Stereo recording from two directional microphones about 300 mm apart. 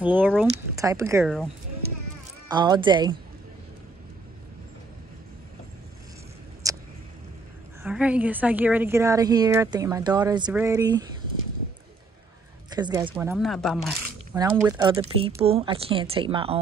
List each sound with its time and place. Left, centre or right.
0.0 s speech: centre
2.5 s a woman's voice: centre
6.6 s a sound: centre
7.8 s a woman's voice: centre
12.6 s a woman's voice: centre
14.3 s a woman's voice: centre